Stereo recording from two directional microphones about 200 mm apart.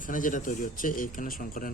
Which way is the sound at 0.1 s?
40° left (ahead or behind).